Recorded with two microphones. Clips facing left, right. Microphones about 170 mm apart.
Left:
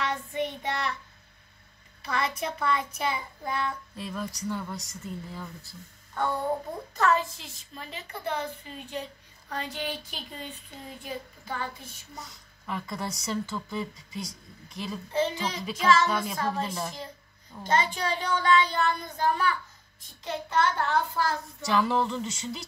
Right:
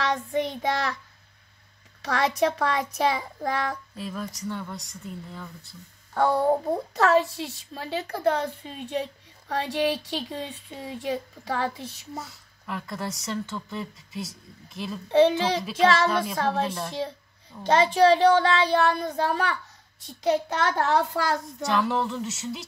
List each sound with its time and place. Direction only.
0.0 s child singing: 85° right
2.0 s a child's voice: 90° right
3.9 s speech: centre (ahead or behind)
6.1 s a woman's voice: 70° right (ahead or behind); by 11.7 s 90° right
12.6 s speech: centre (ahead or behind)
15.0 s a woman's voice: 70° right (ahead or behind)
15.6 s speech: centre (ahead or behind)
16.3 s a woman's voice: 70° right (ahead or behind)
17.6 s a woman's voice: 70° right (ahead or behind); by 21.6 s 90° right
21.6 s speech: centre (ahead or behind)